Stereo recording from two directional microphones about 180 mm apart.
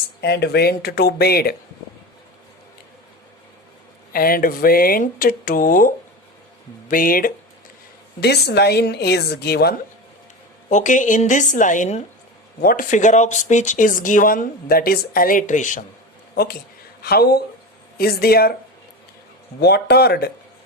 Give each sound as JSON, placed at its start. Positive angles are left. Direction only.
{"t": 0.2, "sound": "speech", "side_deg": 65}
{"t": 4.1, "sound": "speech", "side_deg": 55}
{"t": 8.2, "sound": "speech", "side_deg": 65}
{"t": 10.7, "sound": "speech", "side_deg": 45}
{"t": 17.0, "sound": "speech", "side_deg": 60}
{"t": 19.5, "sound": "speech", "side_deg": 65}